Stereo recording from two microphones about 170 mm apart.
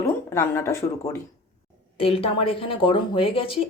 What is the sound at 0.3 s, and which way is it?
Speech, 15° left (ahead or behind).